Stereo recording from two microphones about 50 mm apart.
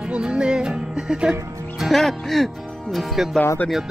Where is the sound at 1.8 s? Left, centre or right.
Centre.